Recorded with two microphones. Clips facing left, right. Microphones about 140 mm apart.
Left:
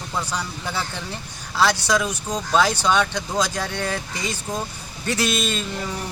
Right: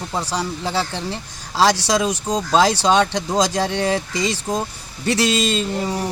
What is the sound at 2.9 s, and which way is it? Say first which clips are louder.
Speech: right 4 dB; 25° right (ahead or behind).